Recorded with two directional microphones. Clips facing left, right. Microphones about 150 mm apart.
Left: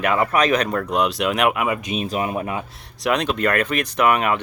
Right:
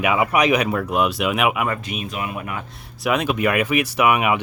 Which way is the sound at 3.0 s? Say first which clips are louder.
Even; 5° right (ahead or behind).